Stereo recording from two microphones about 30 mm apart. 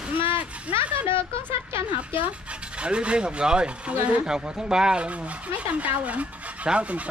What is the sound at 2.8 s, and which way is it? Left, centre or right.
Speech, right.